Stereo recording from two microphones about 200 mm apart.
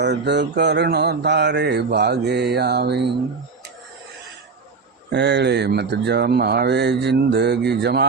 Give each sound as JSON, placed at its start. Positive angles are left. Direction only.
{"t": 0.0, "sound": "mantra", "side_deg": -60}
{"t": 5.1, "sound": "mantra", "side_deg": -60}